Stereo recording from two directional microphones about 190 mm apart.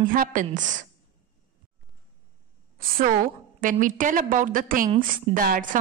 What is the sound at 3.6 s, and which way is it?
A woman's voice, 45° right (ahead or behind).